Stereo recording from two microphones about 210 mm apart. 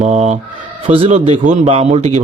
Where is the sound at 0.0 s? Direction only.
30° right (ahead or behind).